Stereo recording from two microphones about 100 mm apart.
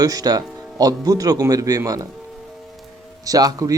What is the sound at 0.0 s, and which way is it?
Speech, 40° right (ahead or behind).